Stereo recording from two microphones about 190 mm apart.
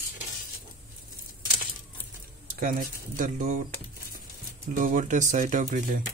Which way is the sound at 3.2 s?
40° right (ahead or behind).